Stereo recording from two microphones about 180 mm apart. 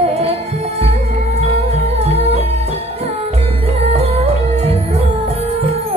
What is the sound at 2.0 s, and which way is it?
Music, 35° right (ahead or behind).